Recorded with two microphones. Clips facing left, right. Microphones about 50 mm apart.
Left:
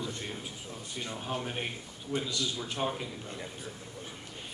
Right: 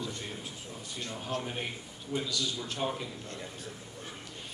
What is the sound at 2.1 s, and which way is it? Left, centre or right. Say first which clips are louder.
A man's voice: even; left.